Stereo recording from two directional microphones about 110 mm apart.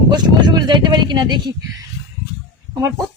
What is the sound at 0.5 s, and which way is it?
Speech, 45° right (ahead or behind).